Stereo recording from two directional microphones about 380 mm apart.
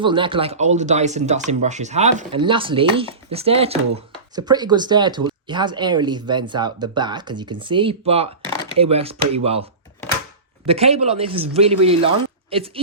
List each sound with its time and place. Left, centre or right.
0.0 s speech: centre
10.7 s speech: centre